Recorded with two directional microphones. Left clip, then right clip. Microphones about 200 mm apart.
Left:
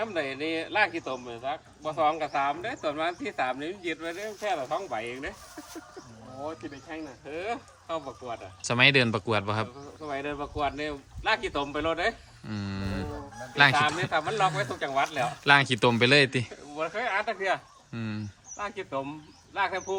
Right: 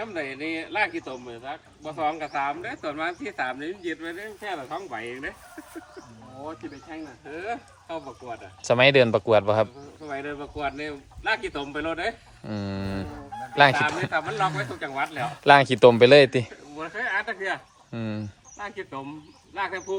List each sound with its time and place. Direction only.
0.0 s speech: 50° left (ahead or behind)
6.9 s speech: 45° left (ahead or behind)
8.6 s speech: 5° left (ahead or behind)
10.1 s speech: 50° left (ahead or behind)
12.5 s a man's voice: 5° left (ahead or behind)
14.1 s speech: 55° left (ahead or behind)
15.3 s a man's voice: centre (ahead or behind)
16.8 s speech: 45° left (ahead or behind)
17.9 s a man's voice: 5° left (ahead or behind)
18.5 s speech: 45° left (ahead or behind)